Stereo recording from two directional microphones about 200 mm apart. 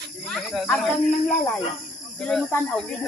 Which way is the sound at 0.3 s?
Centre (ahead or behind).